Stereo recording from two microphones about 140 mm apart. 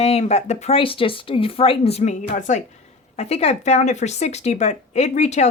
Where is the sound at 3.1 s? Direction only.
50° left (ahead or behind).